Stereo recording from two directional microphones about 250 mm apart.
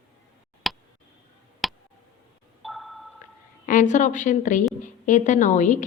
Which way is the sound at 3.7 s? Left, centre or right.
Left.